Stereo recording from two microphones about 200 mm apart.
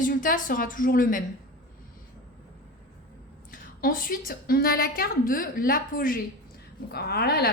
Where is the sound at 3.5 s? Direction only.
45° left (ahead or behind).